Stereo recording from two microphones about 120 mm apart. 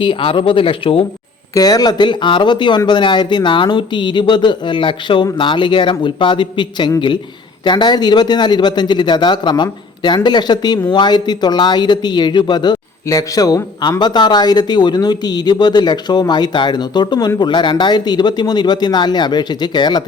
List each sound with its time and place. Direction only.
0.0 s speech: 45° left (ahead or behind)
1.5 s speech: 30° left (ahead or behind)